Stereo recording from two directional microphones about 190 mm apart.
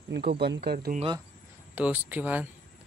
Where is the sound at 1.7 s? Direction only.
10° right (ahead or behind).